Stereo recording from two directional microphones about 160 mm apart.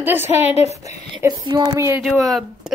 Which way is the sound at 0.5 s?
40° left (ahead or behind).